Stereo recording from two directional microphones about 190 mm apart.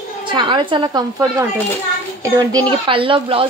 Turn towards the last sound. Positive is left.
turn(degrees=-30)  # may be behind; listen again after turning